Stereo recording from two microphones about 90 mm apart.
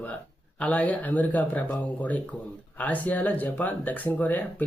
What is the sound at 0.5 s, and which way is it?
Speech, 15° left (ahead or behind).